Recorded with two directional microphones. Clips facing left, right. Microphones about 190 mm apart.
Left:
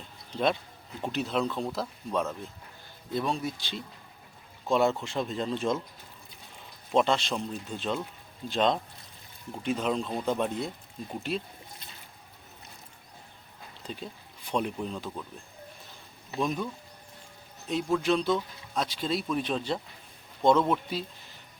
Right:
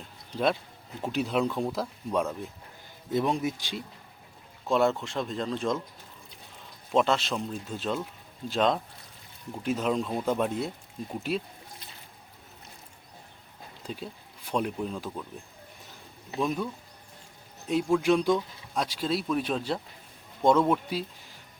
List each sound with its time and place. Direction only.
0.3 s speech: 5° right (ahead or behind)
4.7 s speech: centre (ahead or behind)
6.9 s speech: centre (ahead or behind)
13.8 s speech: 5° right (ahead or behind)
16.4 s speech: 5° right (ahead or behind)
17.7 s speech: 5° right (ahead or behind)